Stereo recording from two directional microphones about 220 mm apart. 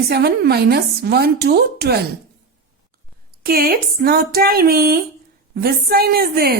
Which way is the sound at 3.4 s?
40° right (ahead or behind).